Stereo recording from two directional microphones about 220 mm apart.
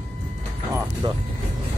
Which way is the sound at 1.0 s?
20° right (ahead or behind).